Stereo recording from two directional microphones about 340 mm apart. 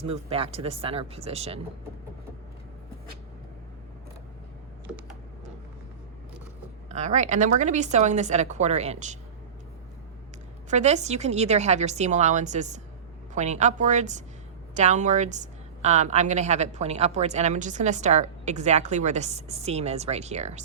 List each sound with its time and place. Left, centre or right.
0.0 s speech: centre
6.8 s a woman's voice: right
10.7 s a woman's voice: centre